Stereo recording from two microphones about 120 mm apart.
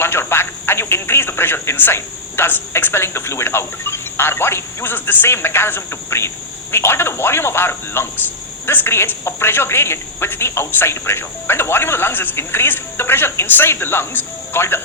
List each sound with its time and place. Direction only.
0.0 s speech: 20° left (ahead or behind)